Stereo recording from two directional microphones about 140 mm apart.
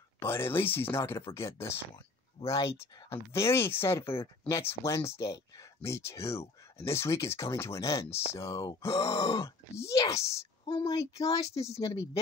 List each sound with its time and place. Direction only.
0.2 s speech: 15° left (ahead or behind)
2.4 s speech: 45° left (ahead or behind)
3.1 s speech: 20° left (ahead or behind)
10.6 s speech: 35° left (ahead or behind)
11.6 s speech: 50° left (ahead or behind)